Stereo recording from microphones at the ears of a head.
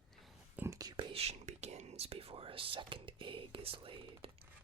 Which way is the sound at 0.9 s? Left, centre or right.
Right.